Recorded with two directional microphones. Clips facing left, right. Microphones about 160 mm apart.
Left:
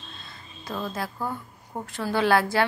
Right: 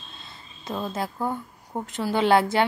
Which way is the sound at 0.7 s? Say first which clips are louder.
Right 2 dB; 20° right (ahead or behind).